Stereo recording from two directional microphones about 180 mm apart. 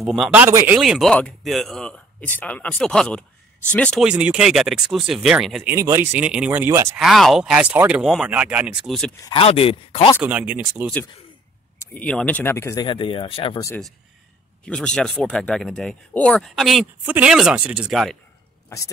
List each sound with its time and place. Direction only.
0.0 s speech: centre (ahead or behind)
0.7 s speech: centre (ahead or behind)
4.0 s speech: 5° right (ahead or behind)
5.7 s speech: 15° right (ahead or behind)
7.0 s speech: centre (ahead or behind)
9.2 s speech: 30° left (ahead or behind)
10.2 s speech: 10° right (ahead or behind)
11.8 s speech: 10° left (ahead or behind)
12.8 s speech: 30° left (ahead or behind)
14.6 s speech: 5° left (ahead or behind)